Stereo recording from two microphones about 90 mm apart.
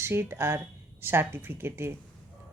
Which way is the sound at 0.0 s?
30° right (ahead or behind).